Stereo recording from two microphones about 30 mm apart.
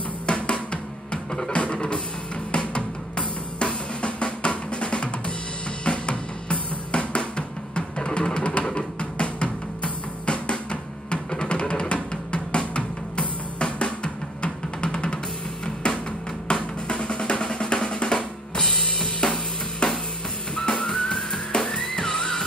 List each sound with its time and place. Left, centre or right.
0.3 s drum: left
1.1 s music: left
1.5 s music: left
2.5 s drum: left
8.2 s music: left
11.9 s drum: left
15.6 s music: left
16.4 s drum: left
18.0 s drum: left
18.8 s drum kit: centre
19.8 s music: left